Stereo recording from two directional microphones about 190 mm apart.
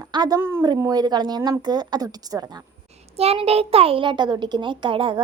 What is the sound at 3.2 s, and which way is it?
A woman's voice, 30° right (ahead or behind).